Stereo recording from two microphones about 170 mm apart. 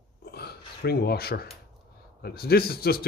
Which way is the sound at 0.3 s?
70° left (ahead or behind).